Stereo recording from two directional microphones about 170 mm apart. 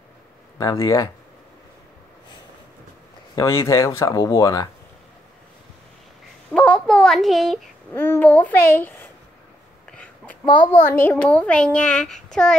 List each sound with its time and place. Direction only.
0.6 s a child's voice: 20° left (ahead or behind)
3.3 s a child's voice: 15° left (ahead or behind)
6.5 s a sound: 5° left (ahead or behind)
7.9 s a child's voice: 10° left (ahead or behind)
9.8 s a sound: 5° left (ahead or behind)
10.4 s a child's voice: 30° left (ahead or behind)
10.7 s a child's voice: 10° left (ahead or behind)